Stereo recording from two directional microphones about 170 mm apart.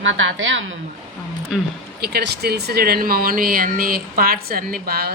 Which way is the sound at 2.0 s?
70° right (ahead or behind).